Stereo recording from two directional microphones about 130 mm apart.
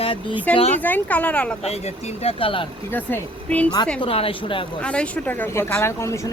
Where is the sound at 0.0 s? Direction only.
45° left (ahead or behind).